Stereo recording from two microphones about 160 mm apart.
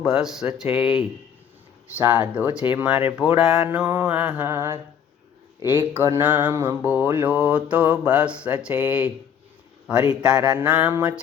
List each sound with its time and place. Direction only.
0.0 s speech: 5° right (ahead or behind)
2.0 s mantra: 10° right (ahead or behind)
3.3 s speech: 5° right (ahead or behind)
3.7 s mantra: 15° right (ahead or behind)
10.1 s speech: 5° right (ahead or behind)
10.6 s mantra: 5° right (ahead or behind)